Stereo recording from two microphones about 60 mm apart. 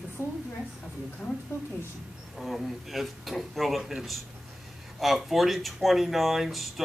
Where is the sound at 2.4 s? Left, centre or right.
Centre.